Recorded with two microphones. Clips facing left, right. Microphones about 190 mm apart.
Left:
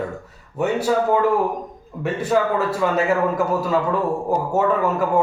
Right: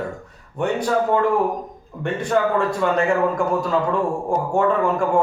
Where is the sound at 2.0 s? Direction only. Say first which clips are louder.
Even; 5° left (ahead or behind).